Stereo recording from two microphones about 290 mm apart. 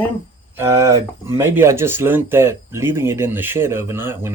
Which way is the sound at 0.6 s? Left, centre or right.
Centre.